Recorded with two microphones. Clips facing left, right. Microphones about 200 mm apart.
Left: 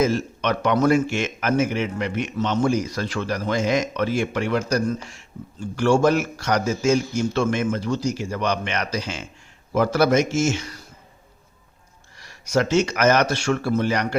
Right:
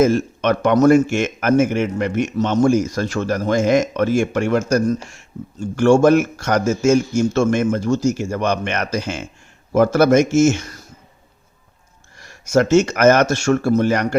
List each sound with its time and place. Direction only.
0.0 s a man's voice: 50° right (ahead or behind)
12.1 s a man's voice: 50° right (ahead or behind)